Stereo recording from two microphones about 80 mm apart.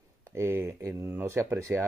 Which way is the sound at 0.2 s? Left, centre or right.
Right.